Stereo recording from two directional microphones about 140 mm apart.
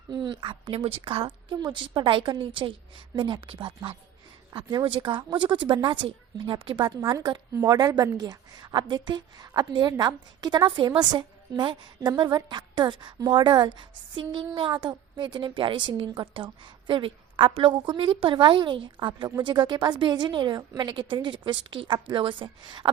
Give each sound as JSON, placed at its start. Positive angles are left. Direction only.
{"t": 0.1, "sound": "a woman's voice", "side_deg": -35}
{"t": 4.9, "sound": "a woman's voice", "side_deg": -35}